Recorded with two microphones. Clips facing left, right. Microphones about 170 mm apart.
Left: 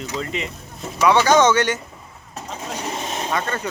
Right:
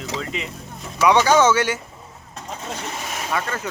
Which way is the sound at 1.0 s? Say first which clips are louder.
Even; 10° right (ahead or behind).